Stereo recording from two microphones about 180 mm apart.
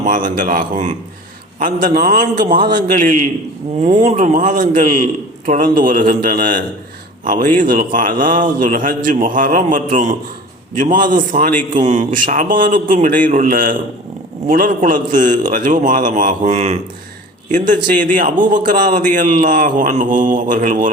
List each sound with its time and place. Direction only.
0.0 s a man's voice: 45° right (ahead or behind)
3.8 s speech: 30° right (ahead or behind)
4.0 s a man's voice: 45° right (ahead or behind)
18.0 s a man's voice: 45° right (ahead or behind)